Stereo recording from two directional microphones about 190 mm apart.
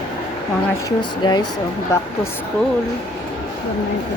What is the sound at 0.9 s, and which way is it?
Speech, 20° left (ahead or behind).